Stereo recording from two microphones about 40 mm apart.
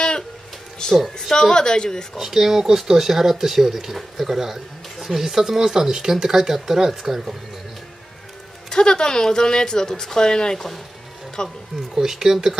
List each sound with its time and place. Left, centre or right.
0.7 s a woman's voice: centre
2.1 s speech: centre
8.6 s speech: centre
11.9 s speech: centre